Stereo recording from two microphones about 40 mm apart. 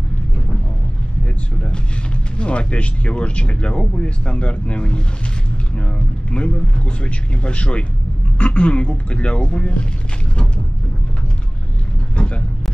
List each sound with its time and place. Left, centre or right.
2.3 s speech: left
12.2 s vehicle: left